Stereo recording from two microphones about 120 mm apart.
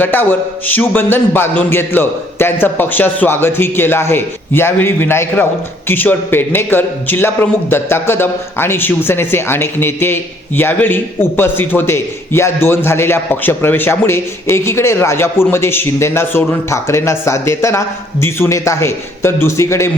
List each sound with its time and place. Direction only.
0.0 s a man's voice: 15° left (ahead or behind)